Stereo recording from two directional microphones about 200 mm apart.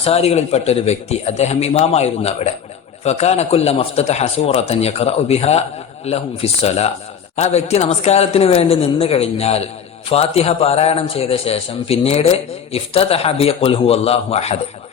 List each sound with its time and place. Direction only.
0.0 s a man's voice: 30° left (ahead or behind)